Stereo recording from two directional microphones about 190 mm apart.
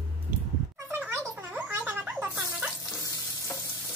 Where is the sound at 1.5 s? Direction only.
10° right (ahead or behind).